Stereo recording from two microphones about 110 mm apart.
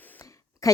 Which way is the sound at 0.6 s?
30° left (ahead or behind).